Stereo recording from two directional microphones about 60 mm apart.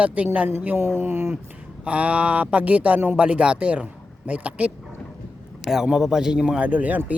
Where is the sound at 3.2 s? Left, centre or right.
Right.